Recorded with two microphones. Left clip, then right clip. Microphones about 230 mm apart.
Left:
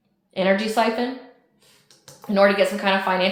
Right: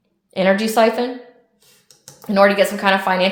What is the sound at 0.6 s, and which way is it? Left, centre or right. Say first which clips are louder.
Speech: right 6 dB; right.